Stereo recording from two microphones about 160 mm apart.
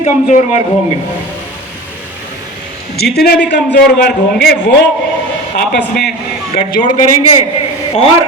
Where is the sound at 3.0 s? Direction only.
80° left.